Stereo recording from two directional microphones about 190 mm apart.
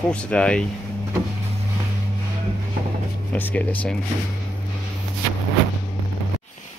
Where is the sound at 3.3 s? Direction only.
10° left (ahead or behind).